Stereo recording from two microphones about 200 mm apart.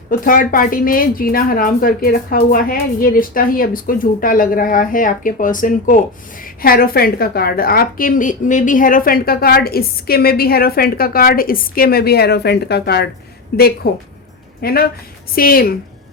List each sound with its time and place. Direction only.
0.1 s a woman's voice: 45° left (ahead or behind)